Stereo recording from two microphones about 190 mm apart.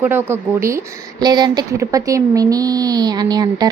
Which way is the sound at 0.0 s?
10° right (ahead or behind).